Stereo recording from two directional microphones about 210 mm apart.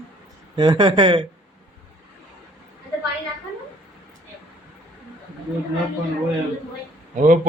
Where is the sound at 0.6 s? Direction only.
20° right (ahead or behind).